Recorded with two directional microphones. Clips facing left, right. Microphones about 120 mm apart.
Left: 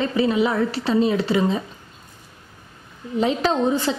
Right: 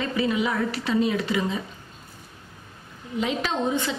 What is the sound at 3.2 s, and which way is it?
Speech, 35° left (ahead or behind).